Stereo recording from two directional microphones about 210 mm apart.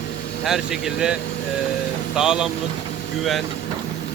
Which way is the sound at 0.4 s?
Centre (ahead or behind).